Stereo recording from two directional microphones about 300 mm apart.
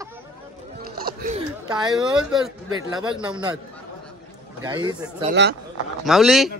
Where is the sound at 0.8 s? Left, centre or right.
Right.